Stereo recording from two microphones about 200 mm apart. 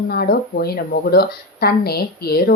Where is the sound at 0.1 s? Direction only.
50° left (ahead or behind).